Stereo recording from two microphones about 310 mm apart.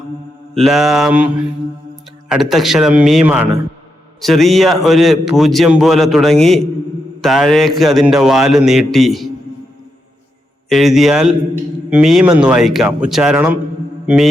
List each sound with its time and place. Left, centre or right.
0.5 s a man's voice: centre
2.3 s a man's voice: centre
10.7 s a man's voice: centre